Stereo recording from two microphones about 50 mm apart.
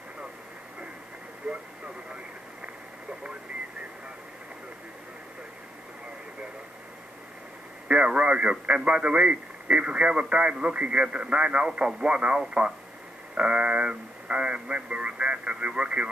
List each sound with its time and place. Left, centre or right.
1.5 s radio: centre
7.9 s speech: right